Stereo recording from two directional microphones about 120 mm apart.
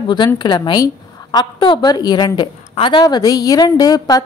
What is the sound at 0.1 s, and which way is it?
A woman's voice, 40° left (ahead or behind).